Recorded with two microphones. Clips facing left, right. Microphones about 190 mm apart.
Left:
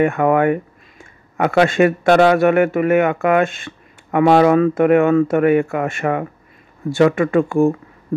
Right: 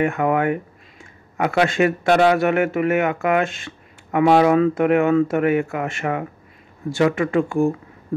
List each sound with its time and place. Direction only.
0.0 s speech: 55° left (ahead or behind)